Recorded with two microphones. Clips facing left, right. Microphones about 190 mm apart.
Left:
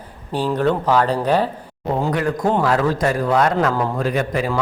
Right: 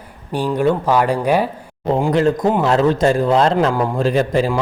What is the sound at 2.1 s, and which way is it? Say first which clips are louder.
Speech: right 4 dB; 25° right (ahead or behind).